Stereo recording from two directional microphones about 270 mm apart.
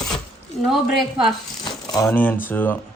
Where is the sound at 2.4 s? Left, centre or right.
Centre.